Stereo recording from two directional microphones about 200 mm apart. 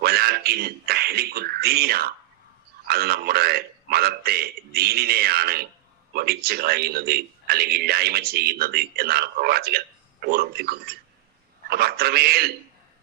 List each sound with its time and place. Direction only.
0.0 s a man's voice: 50° right (ahead or behind)